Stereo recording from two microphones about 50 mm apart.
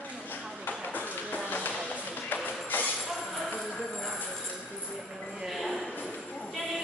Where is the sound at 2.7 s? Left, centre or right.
Left.